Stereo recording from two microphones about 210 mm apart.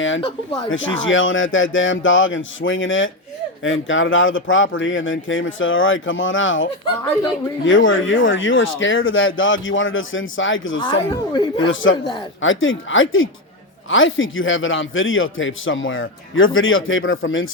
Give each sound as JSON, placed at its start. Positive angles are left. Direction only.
{"t": 0.2, "sound": "speech", "side_deg": 25}
{"t": 1.0, "sound": "a man's voice", "side_deg": 65}
{"t": 10.8, "sound": "speech", "side_deg": 20}
{"t": 11.7, "sound": "a man's voice", "side_deg": 65}